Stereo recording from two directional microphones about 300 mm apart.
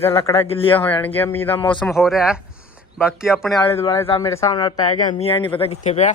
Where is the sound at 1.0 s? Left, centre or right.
Centre.